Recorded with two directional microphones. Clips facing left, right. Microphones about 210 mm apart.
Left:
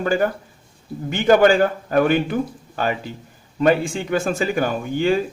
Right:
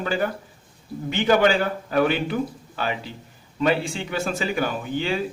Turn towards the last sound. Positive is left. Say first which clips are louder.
# left 6 dB
turn(degrees=45)  # may be behind; listen again after turning